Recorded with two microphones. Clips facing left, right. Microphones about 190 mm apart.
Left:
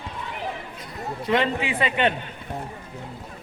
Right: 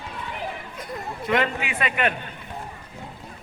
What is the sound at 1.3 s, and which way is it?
Speech, 30° left (ahead or behind).